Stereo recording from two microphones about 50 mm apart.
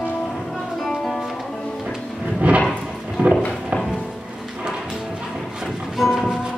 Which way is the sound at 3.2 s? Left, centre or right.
Right.